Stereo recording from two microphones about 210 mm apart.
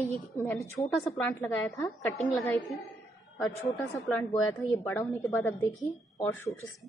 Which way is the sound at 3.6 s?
Centre (ahead or behind).